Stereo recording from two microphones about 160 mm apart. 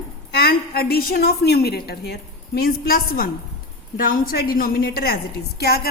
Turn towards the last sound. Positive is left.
turn(degrees=80)